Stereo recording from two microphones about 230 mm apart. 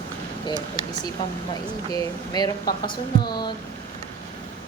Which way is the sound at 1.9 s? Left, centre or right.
Centre.